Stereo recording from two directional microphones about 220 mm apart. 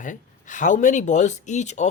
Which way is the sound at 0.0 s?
35° left (ahead or behind).